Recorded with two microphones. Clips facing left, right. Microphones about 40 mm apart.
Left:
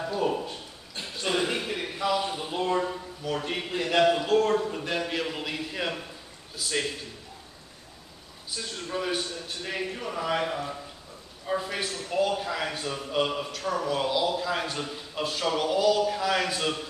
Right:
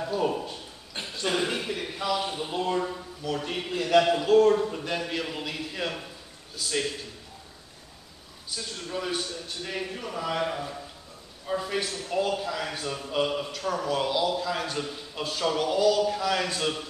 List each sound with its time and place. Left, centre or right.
0.0 s a man's voice: centre
1.2 s chuckle: centre
2.5 s speech: centre
4.2 s speech: centre
8.7 s a man's voice: centre